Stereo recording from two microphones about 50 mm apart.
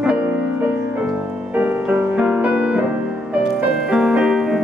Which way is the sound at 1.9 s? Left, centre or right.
Right.